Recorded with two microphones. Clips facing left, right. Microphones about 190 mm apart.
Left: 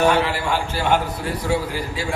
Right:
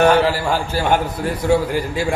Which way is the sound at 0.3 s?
40° right (ahead or behind).